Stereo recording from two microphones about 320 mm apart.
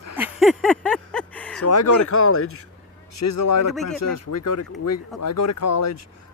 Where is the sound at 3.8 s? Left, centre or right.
Left.